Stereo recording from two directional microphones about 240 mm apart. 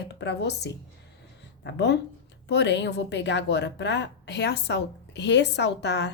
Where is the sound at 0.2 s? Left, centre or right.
Left.